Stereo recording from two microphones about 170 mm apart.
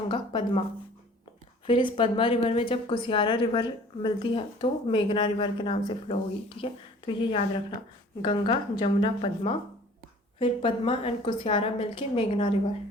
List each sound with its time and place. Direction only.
0.1 s speech: 30° left (ahead or behind)
1.6 s a woman's voice: 30° left (ahead or behind)